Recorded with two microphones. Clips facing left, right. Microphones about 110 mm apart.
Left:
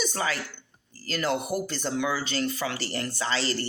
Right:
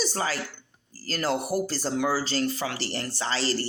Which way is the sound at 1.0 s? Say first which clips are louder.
Even; 40° right (ahead or behind).